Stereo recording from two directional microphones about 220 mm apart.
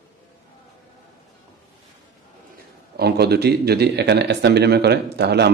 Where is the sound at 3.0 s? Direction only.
45° right (ahead or behind).